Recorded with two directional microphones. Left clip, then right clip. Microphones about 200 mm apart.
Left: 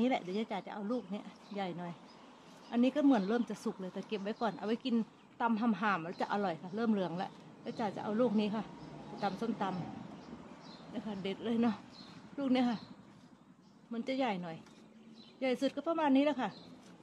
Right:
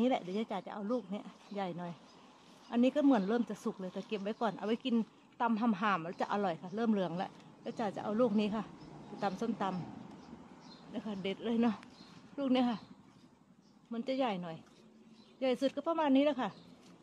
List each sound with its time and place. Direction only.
0.0 s speech: 35° right (ahead or behind)
10.9 s speech: 35° right (ahead or behind)
13.9 s speech: 30° right (ahead or behind)